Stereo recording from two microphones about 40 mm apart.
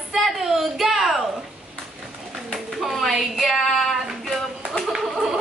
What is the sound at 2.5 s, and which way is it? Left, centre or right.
Pigeon, centre.